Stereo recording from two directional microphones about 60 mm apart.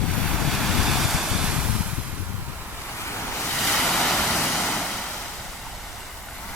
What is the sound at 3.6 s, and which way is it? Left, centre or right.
Vehicle, centre.